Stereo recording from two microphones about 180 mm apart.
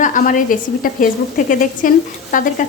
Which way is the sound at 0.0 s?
45° left (ahead or behind).